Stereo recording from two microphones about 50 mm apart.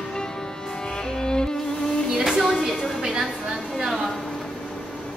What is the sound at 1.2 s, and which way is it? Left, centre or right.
Music, centre.